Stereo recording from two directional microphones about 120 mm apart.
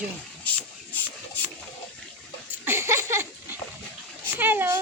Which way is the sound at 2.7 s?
20° right (ahead or behind).